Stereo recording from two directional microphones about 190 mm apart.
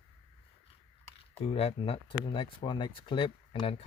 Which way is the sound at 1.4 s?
35° left (ahead or behind).